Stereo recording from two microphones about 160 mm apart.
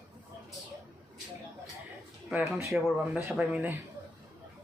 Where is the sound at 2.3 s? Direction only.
15° right (ahead or behind).